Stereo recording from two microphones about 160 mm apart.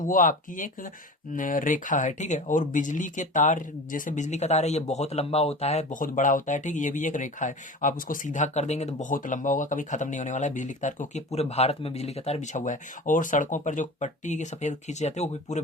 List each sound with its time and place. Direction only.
0.0 s speech: 60° left (ahead or behind)